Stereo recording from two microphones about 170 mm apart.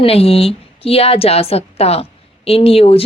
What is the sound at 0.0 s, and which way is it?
A woman's voice, 35° left (ahead or behind).